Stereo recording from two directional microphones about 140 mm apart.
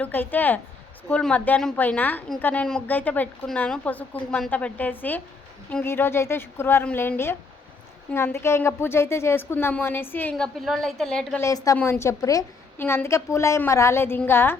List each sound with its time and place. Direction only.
0.0 s a woman's voice: 15° left (ahead or behind)
11.3 s a woman's voice: 20° left (ahead or behind)